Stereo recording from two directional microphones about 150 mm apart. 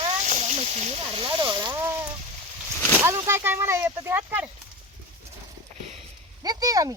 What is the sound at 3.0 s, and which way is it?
Artillery fire, 15° right (ahead or behind).